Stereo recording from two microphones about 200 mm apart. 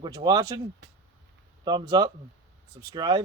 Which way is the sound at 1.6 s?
20° right (ahead or behind).